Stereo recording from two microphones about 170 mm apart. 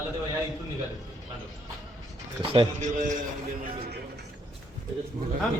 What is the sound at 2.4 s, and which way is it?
Speech, 30° right (ahead or behind).